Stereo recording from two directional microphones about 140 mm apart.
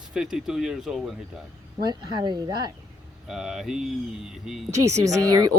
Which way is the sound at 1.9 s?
30° right (ahead or behind).